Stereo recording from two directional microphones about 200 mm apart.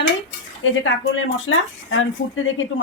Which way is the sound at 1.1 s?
75° left (ahead or behind).